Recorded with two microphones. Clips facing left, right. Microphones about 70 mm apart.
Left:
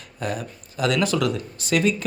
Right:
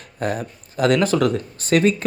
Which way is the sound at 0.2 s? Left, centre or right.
Right.